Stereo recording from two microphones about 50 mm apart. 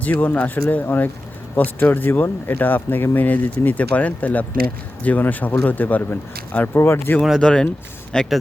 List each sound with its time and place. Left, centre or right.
0.0 s speech: left
3.2 s speech: left
6.7 s speech: left
7.3 s speech: centre